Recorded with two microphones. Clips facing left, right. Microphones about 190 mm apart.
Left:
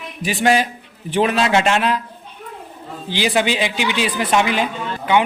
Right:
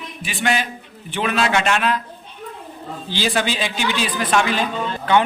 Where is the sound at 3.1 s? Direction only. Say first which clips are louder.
Left 3 dB; 15° left (ahead or behind).